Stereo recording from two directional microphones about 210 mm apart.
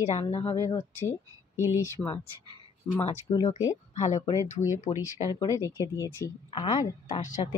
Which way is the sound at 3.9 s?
35° left (ahead or behind).